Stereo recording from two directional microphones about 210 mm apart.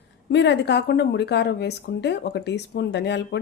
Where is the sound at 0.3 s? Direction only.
55° left (ahead or behind).